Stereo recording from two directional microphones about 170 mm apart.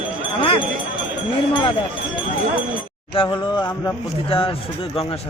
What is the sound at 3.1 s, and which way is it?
Speech, 30° left (ahead or behind).